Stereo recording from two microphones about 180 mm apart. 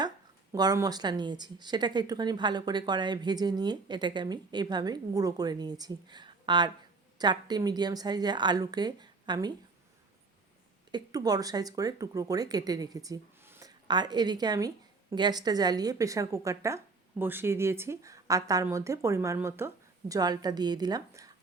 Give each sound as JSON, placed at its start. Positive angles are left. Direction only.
{"t": 0.5, "sound": "a woman's voice", "side_deg": -20}
{"t": 10.9, "sound": "a woman's voice", "side_deg": -20}